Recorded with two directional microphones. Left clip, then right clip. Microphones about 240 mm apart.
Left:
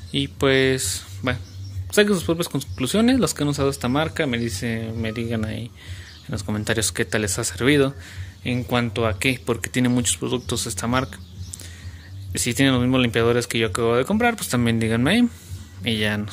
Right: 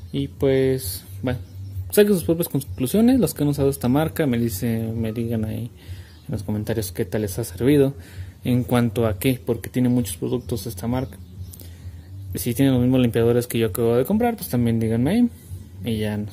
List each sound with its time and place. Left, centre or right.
0.1 s speech: centre
8.5 s speech: right; by 11.1 s centre
12.3 s speech: centre